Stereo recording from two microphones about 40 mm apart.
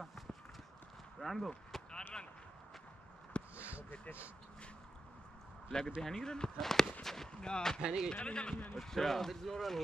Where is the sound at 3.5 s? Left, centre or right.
Right.